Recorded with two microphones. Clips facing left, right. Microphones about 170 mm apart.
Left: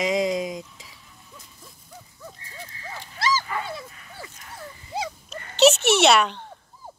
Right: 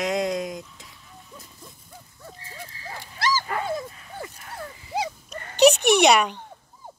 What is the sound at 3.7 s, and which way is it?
Dog, 45° right (ahead or behind).